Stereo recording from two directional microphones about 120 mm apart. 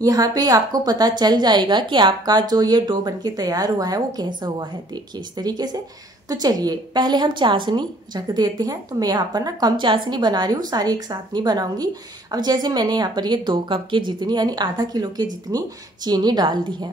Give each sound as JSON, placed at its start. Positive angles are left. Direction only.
{"t": 0.0, "sound": "a woman's voice", "side_deg": -30}